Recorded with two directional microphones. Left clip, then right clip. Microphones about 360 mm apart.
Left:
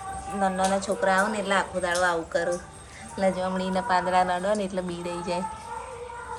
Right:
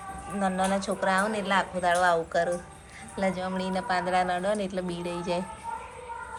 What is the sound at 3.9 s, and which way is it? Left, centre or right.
A woman's voice, centre.